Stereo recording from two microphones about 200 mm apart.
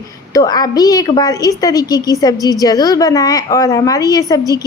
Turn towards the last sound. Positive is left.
turn(degrees=20)  # may be behind; listen again after turning